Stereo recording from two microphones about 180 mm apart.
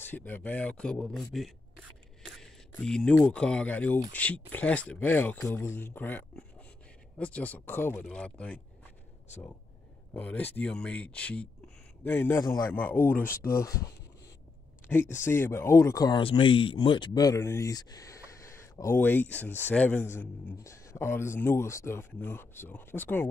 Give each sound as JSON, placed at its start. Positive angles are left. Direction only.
{"t": 0.1, "sound": "speech", "side_deg": 10}
{"t": 10.1, "sound": "speech", "side_deg": 10}